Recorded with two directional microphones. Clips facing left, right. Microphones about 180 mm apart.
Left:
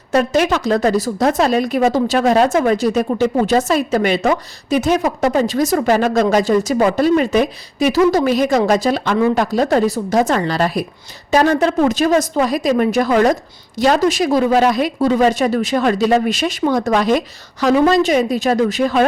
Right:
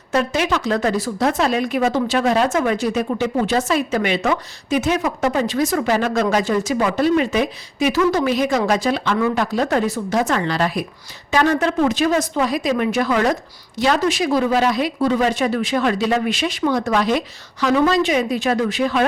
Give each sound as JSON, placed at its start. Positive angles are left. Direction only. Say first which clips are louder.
{"t": 0.1, "sound": "a woman's voice", "louder": "left 4 dB", "side_deg": 40}